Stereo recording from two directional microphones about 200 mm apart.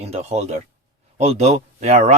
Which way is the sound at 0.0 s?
30° right (ahead or behind).